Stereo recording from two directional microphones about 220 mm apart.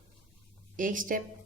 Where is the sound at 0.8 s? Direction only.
40° right (ahead or behind).